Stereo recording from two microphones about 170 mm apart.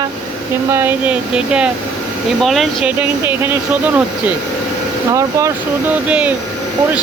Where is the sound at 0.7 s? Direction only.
10° right (ahead or behind).